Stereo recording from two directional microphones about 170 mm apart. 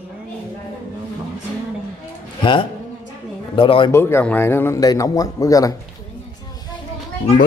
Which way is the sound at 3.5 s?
30° left (ahead or behind).